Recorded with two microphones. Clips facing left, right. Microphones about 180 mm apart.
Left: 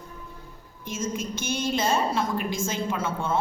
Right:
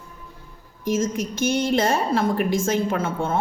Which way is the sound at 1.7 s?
55° right (ahead or behind).